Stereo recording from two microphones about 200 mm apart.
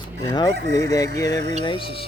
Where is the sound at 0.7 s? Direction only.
15° left (ahead or behind).